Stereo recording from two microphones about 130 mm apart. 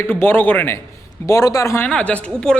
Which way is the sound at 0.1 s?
15° left (ahead or behind).